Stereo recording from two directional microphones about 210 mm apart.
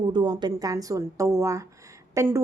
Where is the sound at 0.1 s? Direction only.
20° right (ahead or behind).